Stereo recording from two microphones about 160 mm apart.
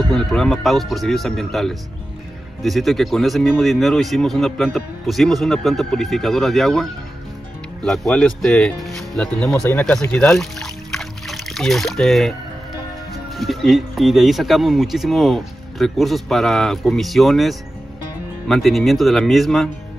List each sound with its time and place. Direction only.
0.1 s speech: centre (ahead or behind)
13.4 s speech: centre (ahead or behind)